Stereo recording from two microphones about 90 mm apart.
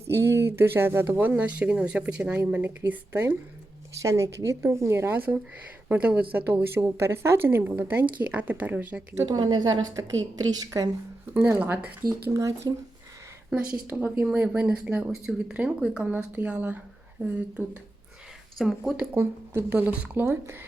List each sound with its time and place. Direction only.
0.1 s a woman's voice: 30° right (ahead or behind)
4.0 s a woman's voice: 35° right (ahead or behind); by 9.0 s 15° right (ahead or behind)
9.4 s a woman's voice: 55° right (ahead or behind)
11.3 s a woman's voice: 20° right (ahead or behind)
12.0 s speech: 40° right (ahead or behind)
13.8 s speech: 20° right (ahead or behind)
18.5 s speech: centre (ahead or behind)
18.9 s a woman's voice: 25° right (ahead or behind)